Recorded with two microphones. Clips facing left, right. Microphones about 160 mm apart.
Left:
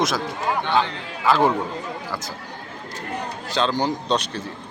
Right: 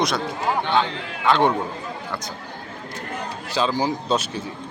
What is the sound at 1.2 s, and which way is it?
Speech, centre (ahead or behind).